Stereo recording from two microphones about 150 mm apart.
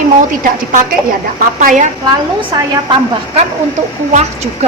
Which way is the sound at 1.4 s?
65° right (ahead or behind).